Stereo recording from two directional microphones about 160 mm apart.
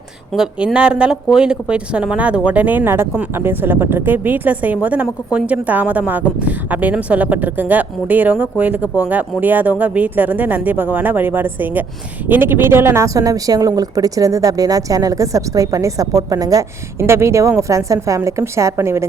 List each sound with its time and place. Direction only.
0.3 s a woman's voice: 5° right (ahead or behind)